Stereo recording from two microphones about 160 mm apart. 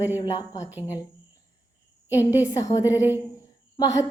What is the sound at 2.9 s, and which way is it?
Speech, 10° right (ahead or behind).